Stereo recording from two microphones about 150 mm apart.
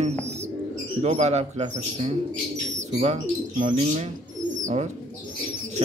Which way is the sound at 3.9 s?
55° right (ahead or behind).